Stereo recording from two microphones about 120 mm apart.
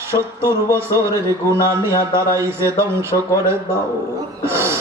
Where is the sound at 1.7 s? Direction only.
30° left (ahead or behind).